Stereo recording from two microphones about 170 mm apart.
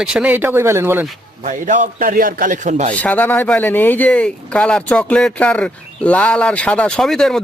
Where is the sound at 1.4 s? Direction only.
50° right (ahead or behind).